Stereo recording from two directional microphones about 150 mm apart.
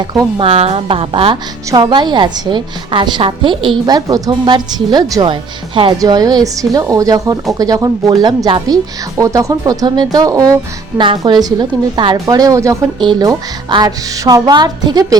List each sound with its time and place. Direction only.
0.0 s a woman's voice: 25° right (ahead or behind)
0.4 s a woman's voice: 45° right (ahead or behind); by 15.2 s 25° right (ahead or behind)